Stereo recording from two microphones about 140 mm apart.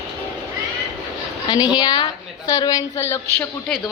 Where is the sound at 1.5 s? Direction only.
30° left (ahead or behind).